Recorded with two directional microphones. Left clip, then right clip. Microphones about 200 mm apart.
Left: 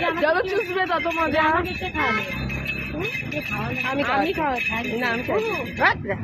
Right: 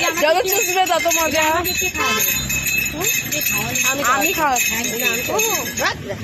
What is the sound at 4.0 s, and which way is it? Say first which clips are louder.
Speech: right 4 dB; centre (ahead or behind).